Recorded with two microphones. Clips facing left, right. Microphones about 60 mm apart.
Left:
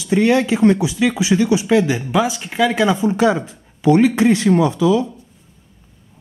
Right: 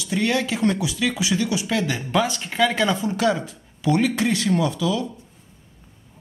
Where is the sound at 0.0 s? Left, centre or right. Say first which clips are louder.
Left 8 dB; left; by 3.0 s centre.